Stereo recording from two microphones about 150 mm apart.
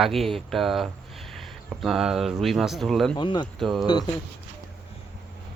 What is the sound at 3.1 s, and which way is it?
Speech, 30° left (ahead or behind).